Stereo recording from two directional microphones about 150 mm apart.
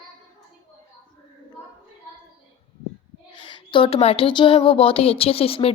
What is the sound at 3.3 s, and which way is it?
A woman's voice, 35° left (ahead or behind).